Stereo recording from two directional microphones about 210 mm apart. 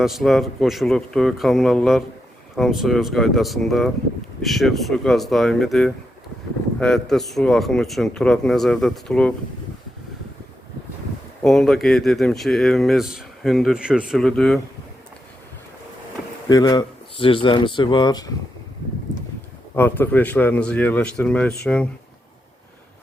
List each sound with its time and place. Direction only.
0.0 s speech: centre (ahead or behind)
11.4 s speech: centre (ahead or behind)
16.5 s speech: 20° left (ahead or behind)
19.7 s speech: 10° left (ahead or behind)